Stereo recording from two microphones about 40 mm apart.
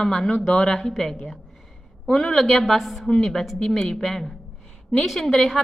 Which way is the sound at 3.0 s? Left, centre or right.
Centre.